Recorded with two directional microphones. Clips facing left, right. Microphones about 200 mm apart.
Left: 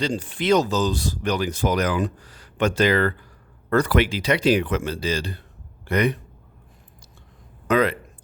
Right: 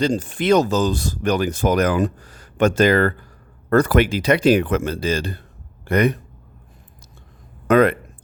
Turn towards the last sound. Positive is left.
turn(degrees=-55)  # may be behind; listen again after turning